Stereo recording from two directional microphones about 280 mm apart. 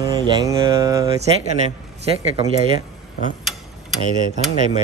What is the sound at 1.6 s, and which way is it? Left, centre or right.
Speech, right.